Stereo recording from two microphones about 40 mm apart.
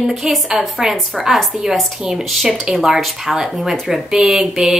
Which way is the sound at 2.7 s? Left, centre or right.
Centre.